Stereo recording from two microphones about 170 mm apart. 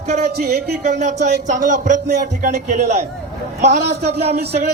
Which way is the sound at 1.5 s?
50° right (ahead or behind).